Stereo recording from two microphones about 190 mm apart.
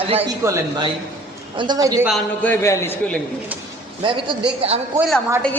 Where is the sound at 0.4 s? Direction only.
15° right (ahead or behind).